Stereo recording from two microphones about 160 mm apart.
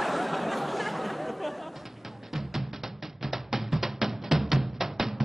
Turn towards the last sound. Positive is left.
turn(degrees=0)  # may be behind; listen again after turning